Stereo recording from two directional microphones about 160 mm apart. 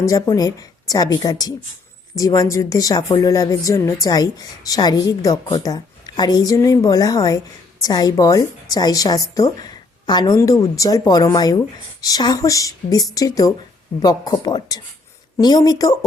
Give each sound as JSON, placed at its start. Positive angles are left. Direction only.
{"t": 0.0, "sound": "speech", "side_deg": 20}